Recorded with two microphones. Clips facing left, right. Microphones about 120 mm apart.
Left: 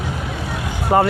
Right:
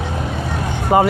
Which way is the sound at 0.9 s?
10° right (ahead or behind).